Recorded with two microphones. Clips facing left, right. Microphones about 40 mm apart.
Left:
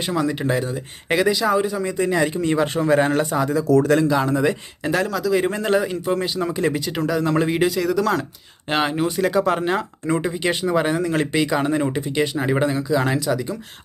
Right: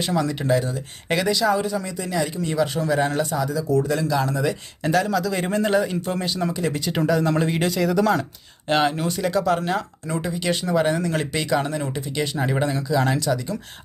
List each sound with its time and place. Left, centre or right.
0.1 s a man's voice: centre
2.0 s speech: left
3.0 s speech: left
3.3 s speech: left
4.1 s speech: left
4.8 s a man's voice: centre
6.5 s speech: left
6.7 s speech: centre
8.7 s a man's voice: centre